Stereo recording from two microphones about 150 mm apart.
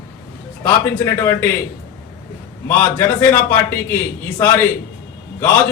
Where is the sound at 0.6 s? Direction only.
15° left (ahead or behind).